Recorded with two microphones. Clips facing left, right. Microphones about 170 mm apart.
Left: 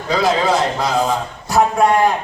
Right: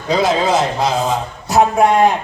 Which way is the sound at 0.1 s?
25° right (ahead or behind).